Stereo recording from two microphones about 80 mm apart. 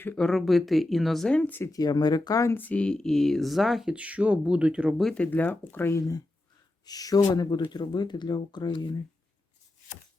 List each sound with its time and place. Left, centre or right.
0.2 s speech: centre
1.3 s speech: centre
1.7 s speech: left
2.6 s speech: centre
3.9 s speech: centre
5.1 s speech: centre
5.9 s speech: left